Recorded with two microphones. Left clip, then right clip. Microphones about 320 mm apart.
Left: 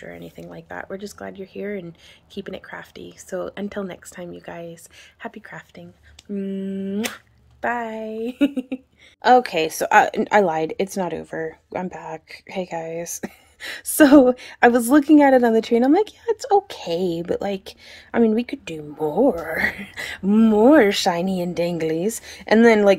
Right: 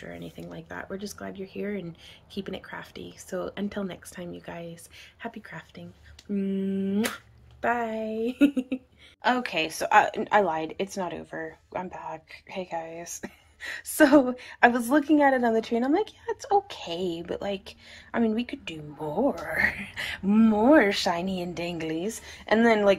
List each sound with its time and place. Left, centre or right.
0.0 s speech: centre
9.2 s speech: left